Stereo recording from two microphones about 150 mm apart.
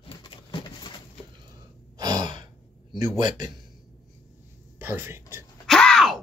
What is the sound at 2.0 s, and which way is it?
Gasp, 25° right (ahead or behind).